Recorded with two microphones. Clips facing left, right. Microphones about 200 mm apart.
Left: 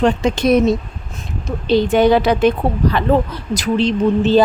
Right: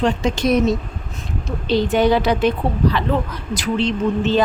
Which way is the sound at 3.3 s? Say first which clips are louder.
Left 3 dB; 40° left (ahead or behind).